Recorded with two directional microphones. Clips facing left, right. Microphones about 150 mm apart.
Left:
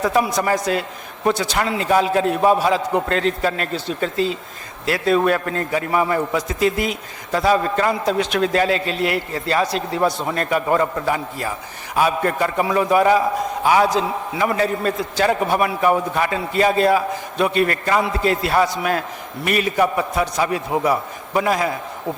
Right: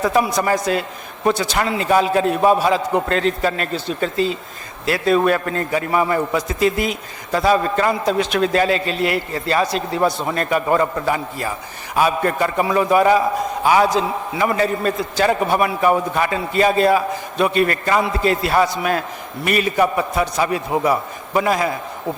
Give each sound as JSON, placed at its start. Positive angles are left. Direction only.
{"t": 0.0, "sound": "a man's voice", "side_deg": -15}